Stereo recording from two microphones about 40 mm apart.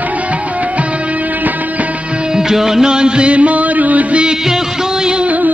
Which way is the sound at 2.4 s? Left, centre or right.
Centre.